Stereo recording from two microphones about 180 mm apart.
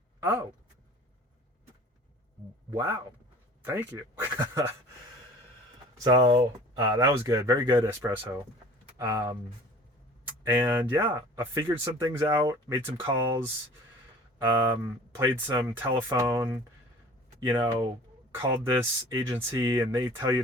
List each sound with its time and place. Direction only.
0.2 s speech: 15° right (ahead or behind)
2.6 s speech: 20° right (ahead or behind)
6.0 s speech: 20° right (ahead or behind)
10.4 s speech: 20° right (ahead or behind)
14.4 s speech: 20° right (ahead or behind)